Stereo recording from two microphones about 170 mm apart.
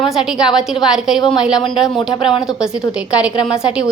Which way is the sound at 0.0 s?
Centre (ahead or behind).